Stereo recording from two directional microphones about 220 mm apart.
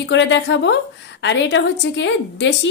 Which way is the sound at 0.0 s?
55° left (ahead or behind).